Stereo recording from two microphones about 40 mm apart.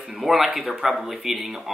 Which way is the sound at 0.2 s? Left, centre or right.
Centre.